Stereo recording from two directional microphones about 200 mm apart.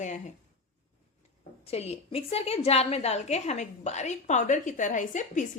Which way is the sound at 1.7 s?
30° left (ahead or behind).